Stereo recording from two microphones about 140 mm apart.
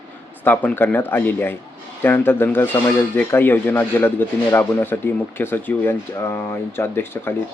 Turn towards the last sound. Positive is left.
turn(degrees=15)  # may be behind; listen again after turning